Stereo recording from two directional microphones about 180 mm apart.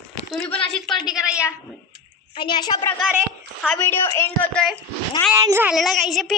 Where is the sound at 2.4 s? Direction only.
25° left (ahead or behind).